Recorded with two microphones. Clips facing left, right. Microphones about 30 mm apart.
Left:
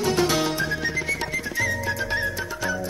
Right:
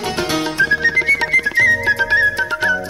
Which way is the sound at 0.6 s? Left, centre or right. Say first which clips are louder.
Right 11 dB; right.